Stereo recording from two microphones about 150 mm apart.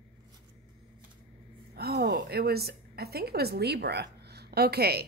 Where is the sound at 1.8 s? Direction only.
90° right.